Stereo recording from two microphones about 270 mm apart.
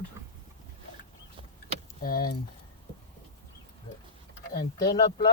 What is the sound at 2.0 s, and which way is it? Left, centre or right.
Speech, left.